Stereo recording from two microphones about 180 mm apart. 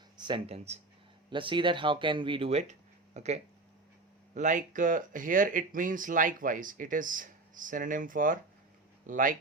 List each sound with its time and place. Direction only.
0.2 s speech: 25° right (ahead or behind); by 9.3 s 50° right (ahead or behind)